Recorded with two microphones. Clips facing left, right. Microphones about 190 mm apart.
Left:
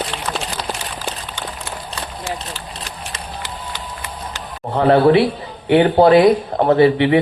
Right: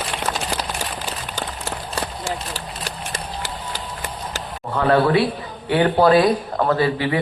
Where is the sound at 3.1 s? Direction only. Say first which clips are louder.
Right 1 dB; 45° right (ahead or behind).